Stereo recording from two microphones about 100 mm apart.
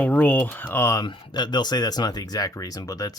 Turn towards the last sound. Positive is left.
turn(degrees=40)  # may be behind; listen again after turning